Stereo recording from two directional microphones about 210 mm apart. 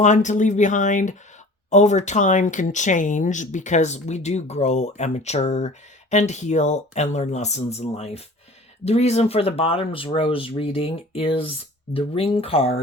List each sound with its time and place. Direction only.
0.0 s speech: 35° left (ahead or behind)